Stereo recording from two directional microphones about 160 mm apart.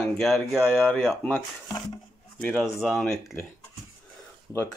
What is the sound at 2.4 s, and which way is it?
Speech, centre (ahead or behind).